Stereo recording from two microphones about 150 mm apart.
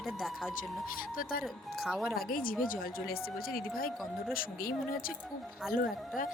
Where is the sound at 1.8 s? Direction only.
Centre (ahead or behind).